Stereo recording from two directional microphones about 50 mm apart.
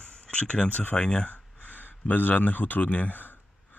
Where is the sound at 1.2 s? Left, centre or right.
Left.